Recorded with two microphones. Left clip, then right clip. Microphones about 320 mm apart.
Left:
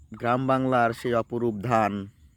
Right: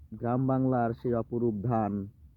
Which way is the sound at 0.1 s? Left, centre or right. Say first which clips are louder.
Left 6 dB; centre.